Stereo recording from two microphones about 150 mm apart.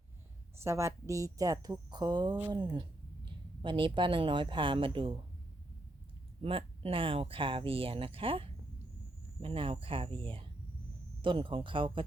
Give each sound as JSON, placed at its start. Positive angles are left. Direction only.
{"t": 0.5, "sound": "speech", "side_deg": -20}
{"t": 6.4, "sound": "speech", "side_deg": -40}